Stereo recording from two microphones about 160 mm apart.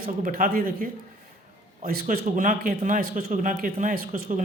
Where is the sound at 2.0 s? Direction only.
55° right (ahead or behind).